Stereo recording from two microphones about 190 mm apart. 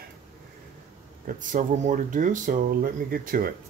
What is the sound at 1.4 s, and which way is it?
Speech, 45° right (ahead or behind).